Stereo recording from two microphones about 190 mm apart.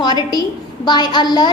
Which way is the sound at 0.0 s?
20° left (ahead or behind).